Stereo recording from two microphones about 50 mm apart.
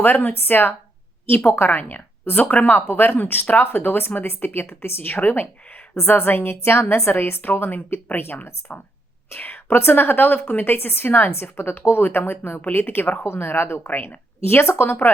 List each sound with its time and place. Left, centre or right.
0.0 s speech: left
2.3 s speech: left